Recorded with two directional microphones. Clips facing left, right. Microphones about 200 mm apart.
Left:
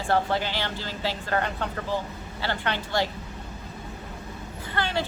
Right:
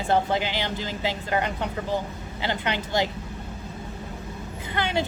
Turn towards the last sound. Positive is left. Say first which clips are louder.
# right 2 dB
turn(degrees=-20)  # may be behind; listen again after turning